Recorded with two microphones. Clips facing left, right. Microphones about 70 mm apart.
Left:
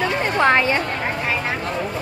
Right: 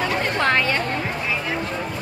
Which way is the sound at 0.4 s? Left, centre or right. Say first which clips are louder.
Left 5 dB; left.